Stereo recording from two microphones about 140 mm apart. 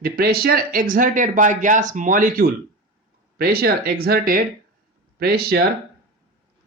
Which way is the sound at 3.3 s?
90° right.